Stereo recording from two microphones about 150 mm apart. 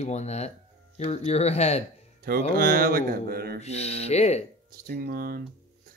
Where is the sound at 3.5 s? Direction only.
45° left (ahead or behind).